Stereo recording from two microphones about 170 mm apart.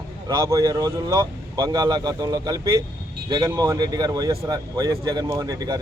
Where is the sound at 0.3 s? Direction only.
20° right (ahead or behind).